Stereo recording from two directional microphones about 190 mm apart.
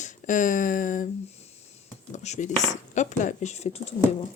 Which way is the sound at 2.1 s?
40° left (ahead or behind).